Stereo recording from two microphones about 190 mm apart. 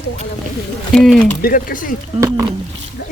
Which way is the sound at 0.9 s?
Centre (ahead or behind).